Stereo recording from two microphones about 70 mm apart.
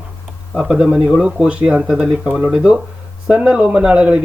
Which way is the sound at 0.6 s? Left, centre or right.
Centre.